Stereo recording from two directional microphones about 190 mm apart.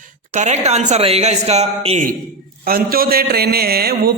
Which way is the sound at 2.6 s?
50° right (ahead or behind).